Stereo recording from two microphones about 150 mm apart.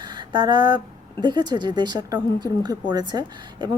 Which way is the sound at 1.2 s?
30° right (ahead or behind).